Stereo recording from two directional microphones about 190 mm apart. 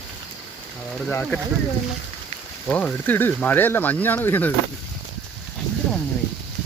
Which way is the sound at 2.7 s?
5° left (ahead or behind).